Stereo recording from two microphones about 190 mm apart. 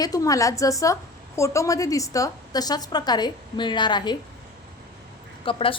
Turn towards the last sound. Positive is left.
turn(degrees=30)  # may be behind; listen again after turning